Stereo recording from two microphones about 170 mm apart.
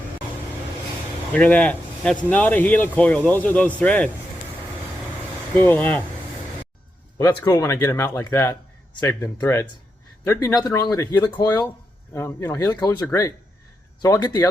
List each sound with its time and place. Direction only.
1.3 s speech: 5° left (ahead or behind)
5.5 s speech: 10° left (ahead or behind)
7.2 s speech: 20° left (ahead or behind)